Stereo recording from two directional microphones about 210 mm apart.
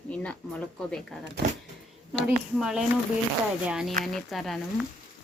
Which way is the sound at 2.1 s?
Centre (ahead or behind).